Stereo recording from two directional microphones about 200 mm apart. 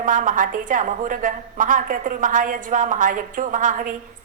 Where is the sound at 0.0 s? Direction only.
40° right (ahead or behind).